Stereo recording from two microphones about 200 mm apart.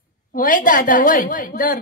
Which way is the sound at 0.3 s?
45° left (ahead or behind).